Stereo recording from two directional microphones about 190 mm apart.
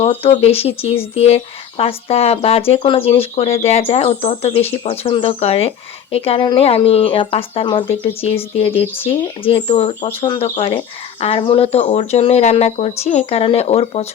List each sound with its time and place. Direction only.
0.0 s speech: 30° left (ahead or behind)